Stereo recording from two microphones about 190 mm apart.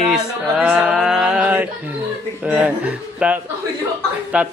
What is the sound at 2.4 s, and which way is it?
Speech, 5° right (ahead or behind).